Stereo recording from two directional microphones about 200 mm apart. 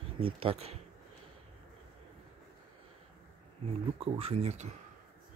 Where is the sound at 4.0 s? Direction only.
30° right (ahead or behind).